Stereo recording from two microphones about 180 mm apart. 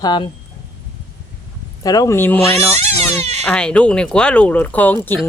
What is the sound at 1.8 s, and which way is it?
Speech, 20° left (ahead or behind).